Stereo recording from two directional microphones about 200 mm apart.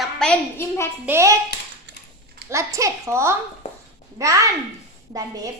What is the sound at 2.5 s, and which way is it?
A child's voice, 15° right (ahead or behind).